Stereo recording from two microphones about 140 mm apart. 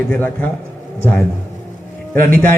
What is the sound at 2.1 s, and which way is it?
Speech, 15° left (ahead or behind).